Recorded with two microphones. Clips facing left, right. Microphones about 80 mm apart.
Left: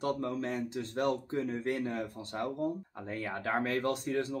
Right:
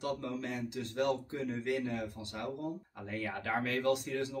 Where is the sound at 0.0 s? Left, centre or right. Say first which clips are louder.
Left 4 dB; left.